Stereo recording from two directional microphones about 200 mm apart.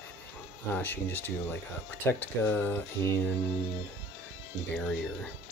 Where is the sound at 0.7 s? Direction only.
10° left (ahead or behind).